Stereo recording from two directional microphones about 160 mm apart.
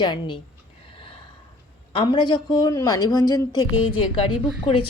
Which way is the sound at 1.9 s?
30° left (ahead or behind).